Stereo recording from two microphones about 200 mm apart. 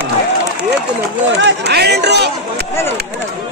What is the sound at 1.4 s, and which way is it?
Speech, 60° right (ahead or behind).